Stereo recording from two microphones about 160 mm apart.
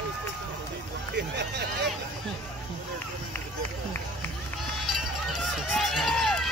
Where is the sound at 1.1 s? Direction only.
90° right.